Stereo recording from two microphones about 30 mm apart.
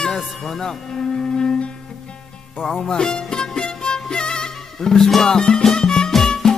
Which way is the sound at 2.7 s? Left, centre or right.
Left.